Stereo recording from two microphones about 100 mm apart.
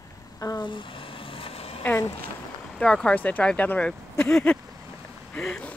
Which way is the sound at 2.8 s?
10° left (ahead or behind).